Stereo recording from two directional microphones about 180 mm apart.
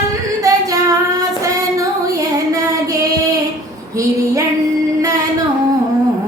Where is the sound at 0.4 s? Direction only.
20° right (ahead or behind).